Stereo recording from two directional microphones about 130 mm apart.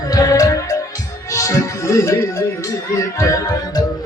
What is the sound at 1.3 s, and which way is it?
Speech, 25° left (ahead or behind).